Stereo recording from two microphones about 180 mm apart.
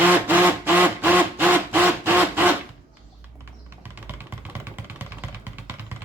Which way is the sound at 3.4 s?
10° right (ahead or behind).